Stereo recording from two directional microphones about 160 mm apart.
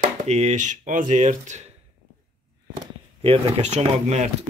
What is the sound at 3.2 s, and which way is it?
Speech, 45° right (ahead or behind).